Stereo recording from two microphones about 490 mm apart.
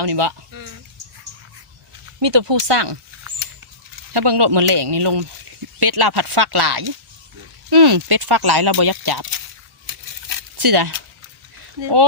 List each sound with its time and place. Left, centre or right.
0.1 s speech: right
2.1 s speech: right
3.2 s rodents: right
4.1 s speech: right
9.8 s a sound: right
11.8 s speech: right